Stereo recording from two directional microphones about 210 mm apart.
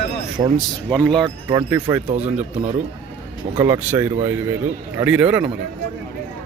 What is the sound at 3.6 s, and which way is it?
Speech, 15° right (ahead or behind).